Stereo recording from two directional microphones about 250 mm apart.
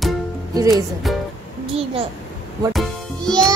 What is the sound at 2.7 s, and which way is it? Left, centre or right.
Music, centre.